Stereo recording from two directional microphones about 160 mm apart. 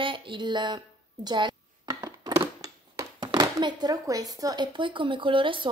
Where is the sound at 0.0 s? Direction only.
30° right (ahead or behind).